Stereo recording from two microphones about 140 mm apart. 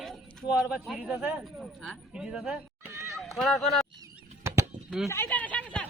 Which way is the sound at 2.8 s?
20° right (ahead or behind).